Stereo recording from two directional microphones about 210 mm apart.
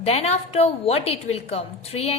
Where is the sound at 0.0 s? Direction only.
30° left (ahead or behind).